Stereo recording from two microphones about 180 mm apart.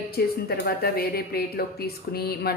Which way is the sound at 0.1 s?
60° left (ahead or behind).